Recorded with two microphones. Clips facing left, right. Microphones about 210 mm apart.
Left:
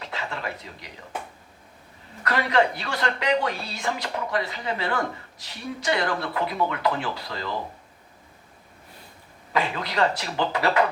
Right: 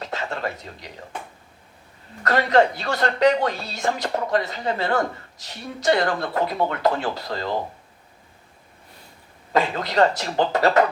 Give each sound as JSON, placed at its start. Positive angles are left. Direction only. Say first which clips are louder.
{"t": 0.0, "sound": "speech", "louder": "right 4 dB", "side_deg": -45}
{"t": 2.2, "sound": "speech", "louder": "right 4 dB", "side_deg": -45}
{"t": 9.5, "sound": "speech", "louder": "right 4 dB", "side_deg": -45}